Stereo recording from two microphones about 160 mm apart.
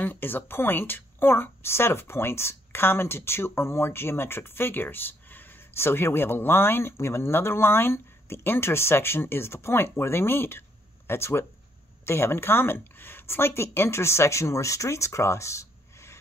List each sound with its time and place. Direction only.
0.0 s speech: 10° left (ahead or behind)